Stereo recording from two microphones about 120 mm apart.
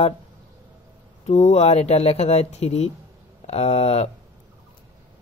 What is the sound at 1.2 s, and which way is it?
Speech, 65° left (ahead or behind).